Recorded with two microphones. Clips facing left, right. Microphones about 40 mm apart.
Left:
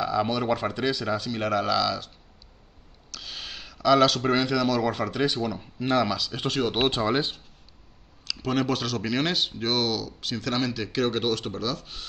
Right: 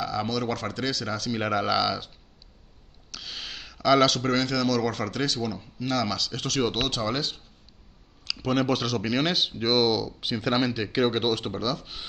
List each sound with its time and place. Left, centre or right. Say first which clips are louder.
0.0 s speech: left 3 dB; centre
1.3 s speech: right 1 dB; centre
3.1 s speech: even; centre
5.8 s speech: left 4 dB; left
6.1 s speech: even; centre
6.8 s speech: left 4 dB; left
8.3 s speech: right 1 dB; centre